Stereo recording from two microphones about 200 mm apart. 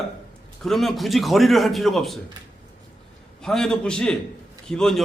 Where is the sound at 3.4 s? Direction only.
Centre (ahead or behind).